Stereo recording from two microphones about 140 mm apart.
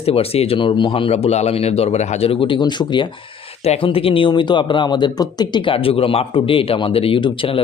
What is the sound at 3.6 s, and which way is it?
A man's voice, 45° left (ahead or behind).